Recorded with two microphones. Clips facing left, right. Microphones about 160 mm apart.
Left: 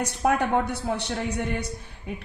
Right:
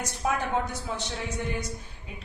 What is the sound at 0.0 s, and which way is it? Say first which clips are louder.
A woman's voice: left 6 dB; 65° left (ahead or behind).